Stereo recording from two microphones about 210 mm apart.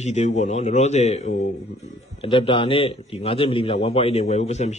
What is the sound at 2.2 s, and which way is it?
A man's voice, 25° left (ahead or behind).